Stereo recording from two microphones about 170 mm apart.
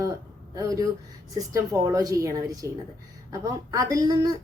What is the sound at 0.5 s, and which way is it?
A woman's voice, 20° right (ahead or behind).